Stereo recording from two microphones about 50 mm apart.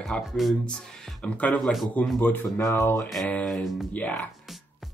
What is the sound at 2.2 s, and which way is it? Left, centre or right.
Speech, left.